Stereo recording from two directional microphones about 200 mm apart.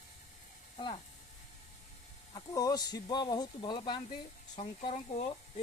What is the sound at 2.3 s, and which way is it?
Speech, 20° left (ahead or behind).